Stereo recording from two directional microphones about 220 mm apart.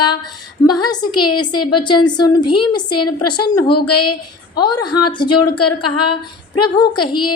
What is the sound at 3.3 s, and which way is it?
Speech, 20° left (ahead or behind).